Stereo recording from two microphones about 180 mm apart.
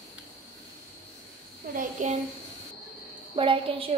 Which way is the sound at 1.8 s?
40° right (ahead or behind).